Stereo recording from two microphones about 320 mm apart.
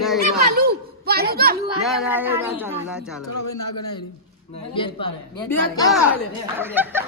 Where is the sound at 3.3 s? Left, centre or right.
Left.